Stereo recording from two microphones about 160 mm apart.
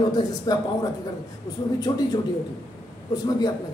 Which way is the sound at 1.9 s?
25° left (ahead or behind).